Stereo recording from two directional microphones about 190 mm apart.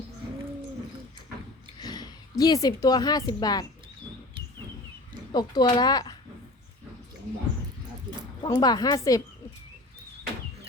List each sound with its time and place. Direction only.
1.8 s a woman's voice: 20° left (ahead or behind)
5.3 s speech: 20° left (ahead or behind)
8.4 s speech: 20° left (ahead or behind)